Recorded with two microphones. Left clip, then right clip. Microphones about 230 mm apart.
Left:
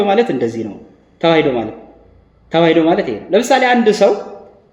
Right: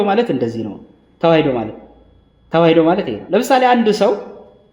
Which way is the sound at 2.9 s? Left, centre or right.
Right.